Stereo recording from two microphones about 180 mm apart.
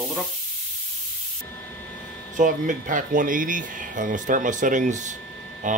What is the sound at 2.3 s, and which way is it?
Speech, 45° right (ahead or behind).